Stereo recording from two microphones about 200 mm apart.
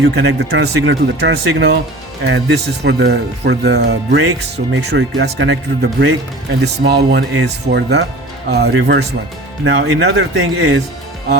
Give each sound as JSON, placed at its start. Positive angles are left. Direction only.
{"t": 0.0, "sound": "speech", "side_deg": -70}
{"t": 9.6, "sound": "speech", "side_deg": -85}
{"t": 10.1, "sound": "speech", "side_deg": -75}